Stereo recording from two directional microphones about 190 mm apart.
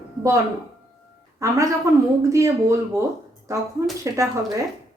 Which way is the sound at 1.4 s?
15° right (ahead or behind).